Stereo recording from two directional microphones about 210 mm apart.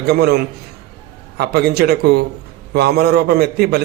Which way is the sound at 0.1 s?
50° right (ahead or behind).